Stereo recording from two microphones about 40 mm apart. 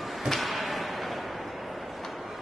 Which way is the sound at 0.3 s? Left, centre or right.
Centre.